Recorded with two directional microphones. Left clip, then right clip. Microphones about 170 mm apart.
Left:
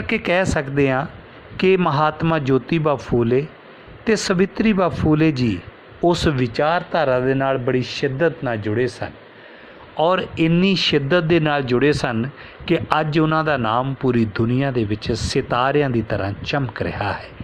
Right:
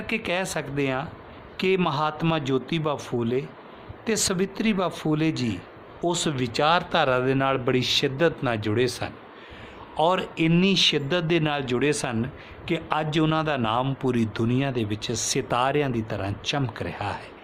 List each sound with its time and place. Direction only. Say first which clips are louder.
0.1 s a man's voice: left 8 dB; 25° left (ahead or behind)